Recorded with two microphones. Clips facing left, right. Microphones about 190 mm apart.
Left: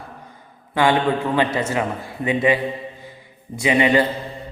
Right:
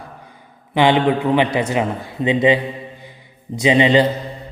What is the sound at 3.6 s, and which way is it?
Speech, 25° right (ahead or behind).